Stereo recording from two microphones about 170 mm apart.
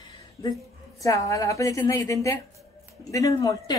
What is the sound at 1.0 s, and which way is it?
Speech, 20° left (ahead or behind).